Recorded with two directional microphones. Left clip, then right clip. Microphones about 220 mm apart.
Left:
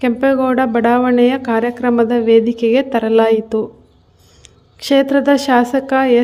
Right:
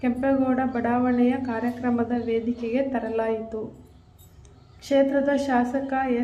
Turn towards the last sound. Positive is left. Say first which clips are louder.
# left 12 dB
turn(degrees=50)  # may be behind; listen again after turning